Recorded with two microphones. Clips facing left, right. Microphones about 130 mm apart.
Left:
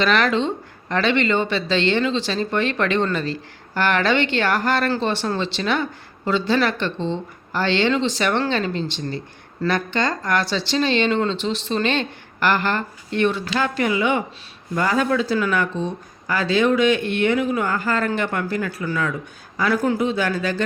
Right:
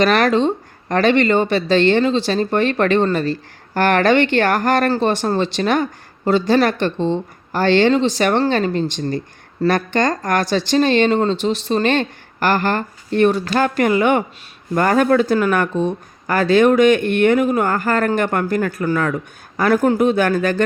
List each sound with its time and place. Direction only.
0.0 s speech: 45° right (ahead or behind)